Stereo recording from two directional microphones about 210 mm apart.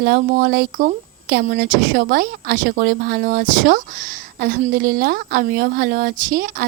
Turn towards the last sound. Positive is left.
turn(degrees=-45)  # may be behind; listen again after turning